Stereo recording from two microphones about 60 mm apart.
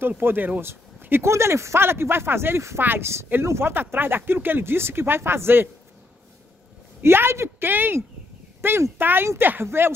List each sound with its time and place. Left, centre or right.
0.2 s speech: right
1.3 s speech: right
7.0 s speech: right